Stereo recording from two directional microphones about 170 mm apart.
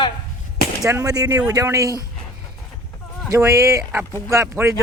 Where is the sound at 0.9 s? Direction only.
20° right (ahead or behind).